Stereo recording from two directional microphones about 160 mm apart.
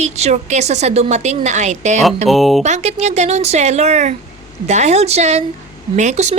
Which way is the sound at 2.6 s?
45° right (ahead or behind).